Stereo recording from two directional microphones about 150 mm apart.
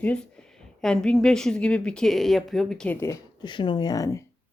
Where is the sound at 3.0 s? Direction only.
20° left (ahead or behind).